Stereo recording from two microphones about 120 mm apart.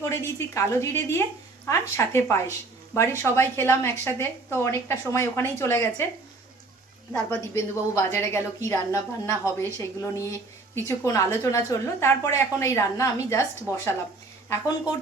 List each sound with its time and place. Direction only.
0.0 s a woman's voice: 25° left (ahead or behind)
7.1 s a woman's voice: 25° left (ahead or behind)